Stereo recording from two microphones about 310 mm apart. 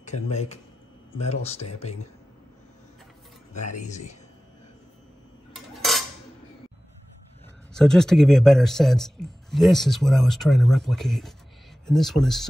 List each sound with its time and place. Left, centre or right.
0.0 s speech: left
3.5 s speech: left
5.5 s cutlery: centre
7.7 s speech: centre